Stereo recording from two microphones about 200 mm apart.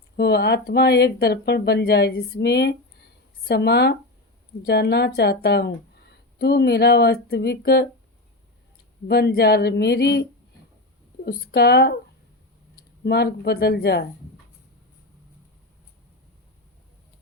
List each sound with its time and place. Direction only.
0.2 s speech: 55° left (ahead or behind)
9.0 s speech: 55° left (ahead or behind)
11.3 s speech: 55° left (ahead or behind)
13.1 s speech: 55° left (ahead or behind)